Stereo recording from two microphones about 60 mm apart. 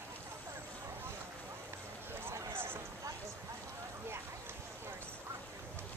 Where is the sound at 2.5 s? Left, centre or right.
Right.